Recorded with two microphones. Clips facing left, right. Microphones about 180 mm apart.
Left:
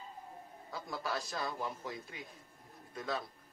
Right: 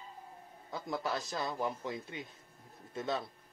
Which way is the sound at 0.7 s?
20° right (ahead or behind).